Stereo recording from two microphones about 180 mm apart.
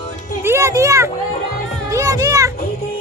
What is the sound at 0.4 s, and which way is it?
Music, 15° right (ahead or behind).